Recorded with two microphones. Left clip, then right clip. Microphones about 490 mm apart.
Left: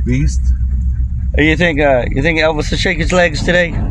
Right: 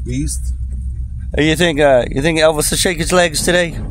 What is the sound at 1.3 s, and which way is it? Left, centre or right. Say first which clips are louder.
Speech: left 1 dB; right.